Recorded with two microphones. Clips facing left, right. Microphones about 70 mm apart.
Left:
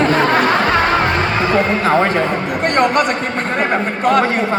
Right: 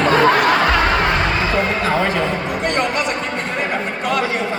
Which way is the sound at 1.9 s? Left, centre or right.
Left.